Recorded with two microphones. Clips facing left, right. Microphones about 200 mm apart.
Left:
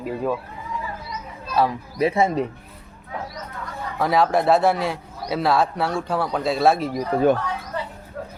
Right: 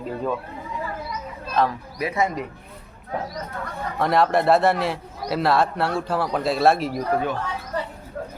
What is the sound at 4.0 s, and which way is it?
A man's voice, centre (ahead or behind).